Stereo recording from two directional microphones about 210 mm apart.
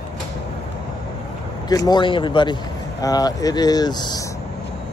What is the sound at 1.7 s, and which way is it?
Speech, 20° left (ahead or behind).